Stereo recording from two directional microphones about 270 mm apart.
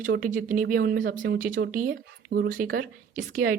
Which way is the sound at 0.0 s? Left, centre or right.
Right.